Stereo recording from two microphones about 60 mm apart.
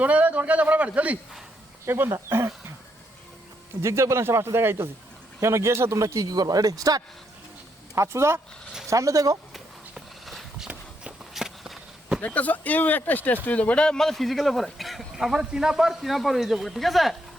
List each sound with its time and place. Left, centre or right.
0.0 s speech: right
1.8 s speech: right
2.0 s speech: right
3.8 s a man's voice: right
7.9 s speech: right
8.9 s speech: right
9.5 s horse: centre
11.3 s a sound: centre
12.2 s speech: left; by 17.2 s centre